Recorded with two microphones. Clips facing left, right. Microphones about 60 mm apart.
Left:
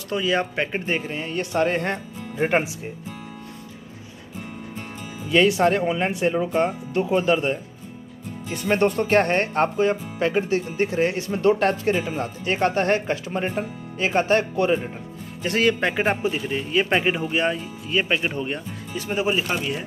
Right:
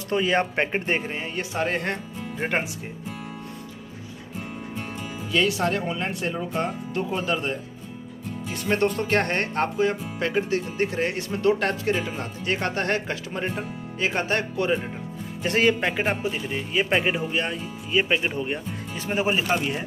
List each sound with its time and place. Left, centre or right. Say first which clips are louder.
0.1 s speech: even; right
1.1 s speech: left 4 dB; centre
5.3 s speech: left 5 dB; left; by 7.5 s centre
8.5 s speech: left 3 dB; centre
15.4 s speech: even; right
16.2 s speech: left 3 dB; centre
18.9 s speech: left 1 dB; right